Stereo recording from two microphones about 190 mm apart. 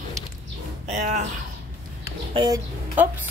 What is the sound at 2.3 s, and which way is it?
Speech, 25° right (ahead or behind).